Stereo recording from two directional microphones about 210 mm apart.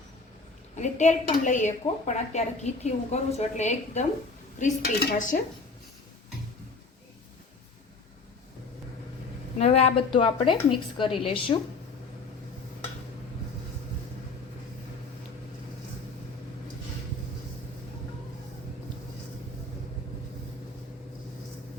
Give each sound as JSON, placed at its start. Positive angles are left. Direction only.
{"t": 0.8, "sound": "a woman's voice", "side_deg": 35}
{"t": 9.6, "sound": "a woman's voice", "side_deg": 30}